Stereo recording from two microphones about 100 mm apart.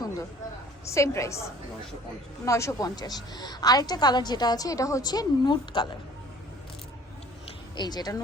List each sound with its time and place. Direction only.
0.9 s a woman's voice: 30° left (ahead or behind)
2.4 s a woman's voice: 30° left (ahead or behind); by 5.9 s 50° left (ahead or behind)
7.8 s speech: 40° left (ahead or behind)